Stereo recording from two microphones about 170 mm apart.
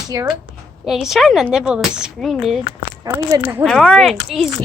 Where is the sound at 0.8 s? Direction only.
Centre (ahead or behind).